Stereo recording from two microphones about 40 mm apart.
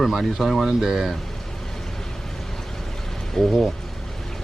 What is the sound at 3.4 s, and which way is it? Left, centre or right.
Speech, centre.